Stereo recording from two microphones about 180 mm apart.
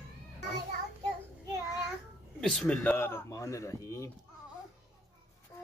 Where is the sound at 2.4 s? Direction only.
Centre (ahead or behind); by 4.1 s 15° left (ahead or behind).